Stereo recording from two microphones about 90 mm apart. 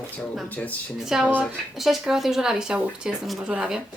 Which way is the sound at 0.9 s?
5° right (ahead or behind).